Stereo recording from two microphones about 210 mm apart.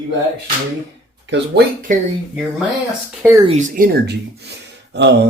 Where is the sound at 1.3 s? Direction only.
55° right (ahead or behind).